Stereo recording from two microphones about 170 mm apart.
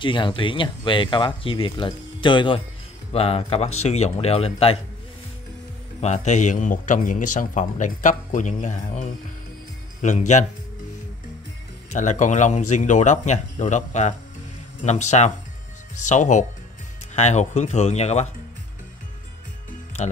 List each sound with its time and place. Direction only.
0.0 s speech: 30° left (ahead or behind)
5.9 s a man's voice: 40° left (ahead or behind)
11.9 s a man's voice: 45° left (ahead or behind)